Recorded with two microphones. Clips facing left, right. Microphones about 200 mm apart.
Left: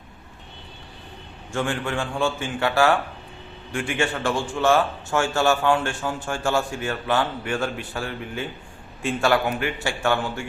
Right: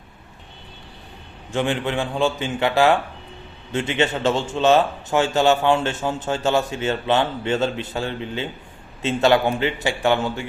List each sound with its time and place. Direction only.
1.5 s a man's voice: 20° right (ahead or behind)